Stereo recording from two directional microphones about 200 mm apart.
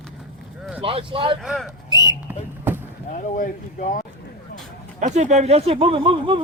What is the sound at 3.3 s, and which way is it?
Speech, 40° left (ahead or behind).